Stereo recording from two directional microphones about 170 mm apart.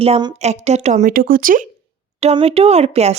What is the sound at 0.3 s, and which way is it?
Speech, 40° right (ahead or behind).